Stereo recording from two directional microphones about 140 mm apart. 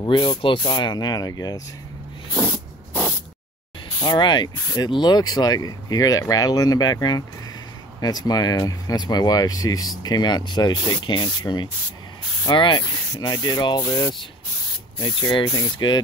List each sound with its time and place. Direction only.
0.0 s speech: 35° left (ahead or behind)
4.0 s speech: 30° left (ahead or behind)
13.8 s speech: 20° left (ahead or behind)
15.0 s speech: 30° left (ahead or behind)